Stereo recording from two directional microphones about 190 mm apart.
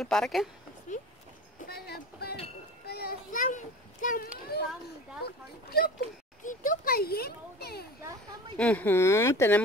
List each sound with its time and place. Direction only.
0.0 s a woman's voice: centre (ahead or behind)
1.6 s a sound: 55° left (ahead or behind)
2.9 s children playing: 55° left (ahead or behind)
5.2 s speech: 55° left (ahead or behind)
6.4 s a sound: 45° left (ahead or behind)
8.5 s speech: 5° left (ahead or behind)